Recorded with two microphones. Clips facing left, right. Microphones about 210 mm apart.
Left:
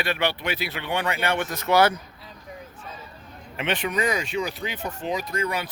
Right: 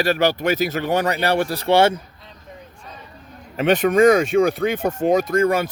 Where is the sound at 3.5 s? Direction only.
45° right (ahead or behind).